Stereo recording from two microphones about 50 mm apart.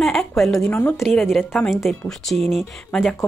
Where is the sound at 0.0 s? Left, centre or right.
Centre.